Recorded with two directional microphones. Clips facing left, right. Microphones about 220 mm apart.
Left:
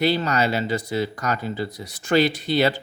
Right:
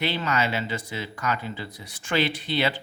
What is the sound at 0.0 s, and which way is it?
A man's voice, 40° left (ahead or behind).